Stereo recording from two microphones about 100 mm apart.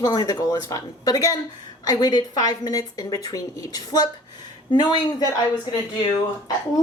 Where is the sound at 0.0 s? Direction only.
40° left (ahead or behind).